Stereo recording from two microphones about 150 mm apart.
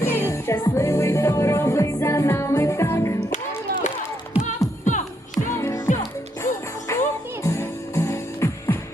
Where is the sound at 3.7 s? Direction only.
90° right.